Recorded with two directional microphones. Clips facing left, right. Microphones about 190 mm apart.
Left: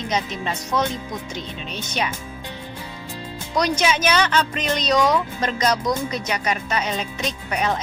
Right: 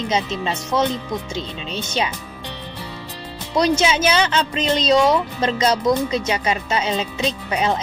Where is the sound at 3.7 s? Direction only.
30° right (ahead or behind).